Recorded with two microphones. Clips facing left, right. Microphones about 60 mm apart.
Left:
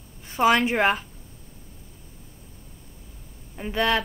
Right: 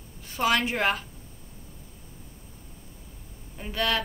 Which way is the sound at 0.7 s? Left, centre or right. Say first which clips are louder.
Left 4 dB; left.